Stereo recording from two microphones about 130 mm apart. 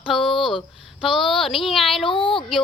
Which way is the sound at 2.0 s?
40° left (ahead or behind).